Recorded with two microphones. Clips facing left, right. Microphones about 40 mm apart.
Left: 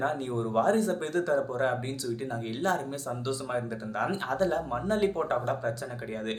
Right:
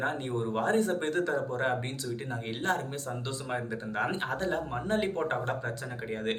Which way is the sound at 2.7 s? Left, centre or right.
Right.